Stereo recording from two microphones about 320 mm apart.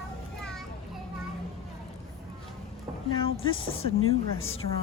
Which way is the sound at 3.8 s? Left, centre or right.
Left.